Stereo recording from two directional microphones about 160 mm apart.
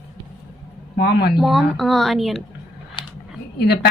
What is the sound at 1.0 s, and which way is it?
Speech, 90° left.